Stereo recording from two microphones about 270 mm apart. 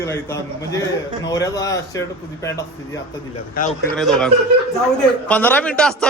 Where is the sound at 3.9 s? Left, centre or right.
Centre.